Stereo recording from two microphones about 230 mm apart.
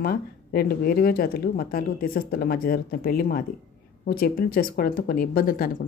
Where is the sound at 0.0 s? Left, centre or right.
Left.